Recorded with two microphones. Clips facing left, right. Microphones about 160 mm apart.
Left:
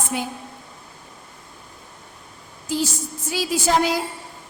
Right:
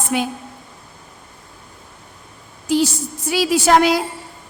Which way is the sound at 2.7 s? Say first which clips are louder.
Right 7 dB; 75° right (ahead or behind).